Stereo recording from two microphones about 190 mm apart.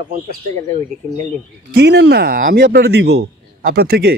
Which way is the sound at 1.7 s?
60° right (ahead or behind).